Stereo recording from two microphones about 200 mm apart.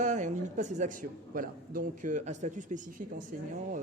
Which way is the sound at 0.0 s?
35° right (ahead or behind).